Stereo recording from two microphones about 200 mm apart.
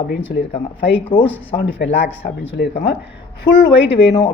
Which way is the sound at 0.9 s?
25° left (ahead or behind).